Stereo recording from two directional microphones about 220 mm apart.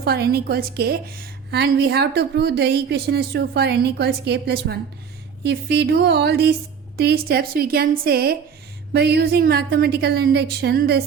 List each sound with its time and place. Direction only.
0.0 s a woman's voice: 45° right (ahead or behind)